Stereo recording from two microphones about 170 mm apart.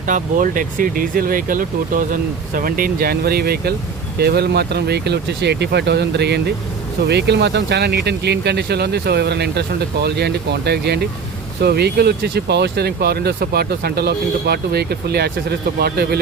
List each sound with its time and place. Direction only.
0.1 s speech: 50° right (ahead or behind); by 16.1 s 65° right (ahead or behind)